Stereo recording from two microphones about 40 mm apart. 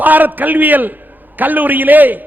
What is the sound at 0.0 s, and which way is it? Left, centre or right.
A man's voice, right.